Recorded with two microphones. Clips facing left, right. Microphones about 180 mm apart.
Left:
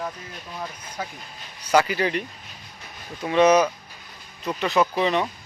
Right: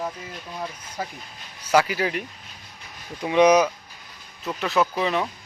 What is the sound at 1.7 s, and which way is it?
Speech, 5° right (ahead or behind).